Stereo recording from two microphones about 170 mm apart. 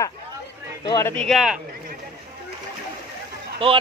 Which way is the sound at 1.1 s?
Centre (ahead or behind).